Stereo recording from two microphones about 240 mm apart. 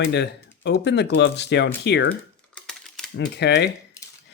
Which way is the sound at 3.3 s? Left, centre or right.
Left.